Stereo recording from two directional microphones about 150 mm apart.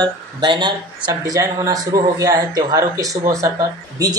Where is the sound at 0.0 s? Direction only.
30° right (ahead or behind).